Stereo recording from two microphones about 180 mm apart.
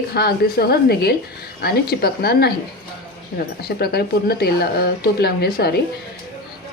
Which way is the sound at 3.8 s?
60° left (ahead or behind).